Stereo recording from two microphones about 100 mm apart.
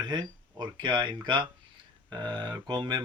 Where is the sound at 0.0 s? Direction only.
40° right (ahead or behind).